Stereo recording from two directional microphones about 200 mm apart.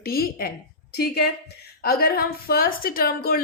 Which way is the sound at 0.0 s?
50° left (ahead or behind).